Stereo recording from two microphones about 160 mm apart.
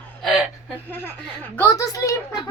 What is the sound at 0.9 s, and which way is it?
Speech, 10° left (ahead or behind).